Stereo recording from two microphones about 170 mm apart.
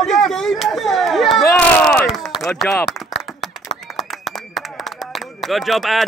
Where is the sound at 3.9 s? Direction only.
Centre (ahead or behind).